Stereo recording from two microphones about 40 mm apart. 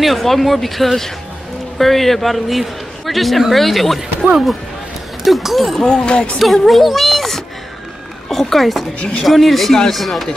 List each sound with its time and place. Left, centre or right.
0.0 s a man's voice: centre
5.2 s a man's voice: centre
5.9 s speech: left
6.3 s a man's voice: centre